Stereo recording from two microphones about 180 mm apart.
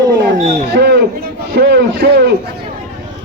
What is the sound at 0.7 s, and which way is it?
A man's voice, 65° right (ahead or behind).